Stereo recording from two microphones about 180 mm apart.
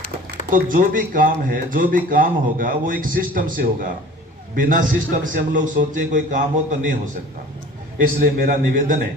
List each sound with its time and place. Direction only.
0.5 s speech: 50° right (ahead or behind)
7.9 s speech: 55° right (ahead or behind)